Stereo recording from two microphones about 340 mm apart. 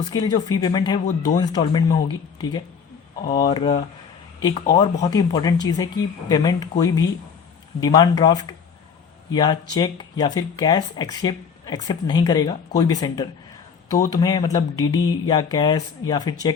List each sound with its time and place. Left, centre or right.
0.0 s speech: centre
3.3 s speech: centre